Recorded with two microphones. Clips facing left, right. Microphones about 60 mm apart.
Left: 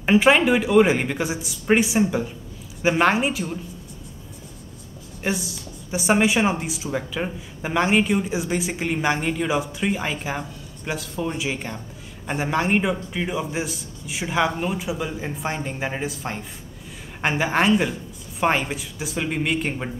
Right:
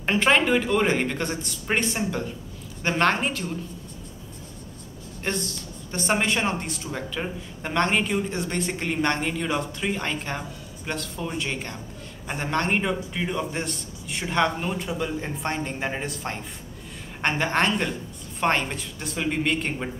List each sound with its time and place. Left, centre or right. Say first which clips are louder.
0.0 s speech: left 4 dB; centre
5.2 s a woman's voice: left 3 dB; centre